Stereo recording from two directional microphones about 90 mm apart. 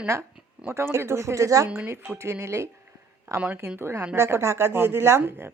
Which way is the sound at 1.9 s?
25° right (ahead or behind).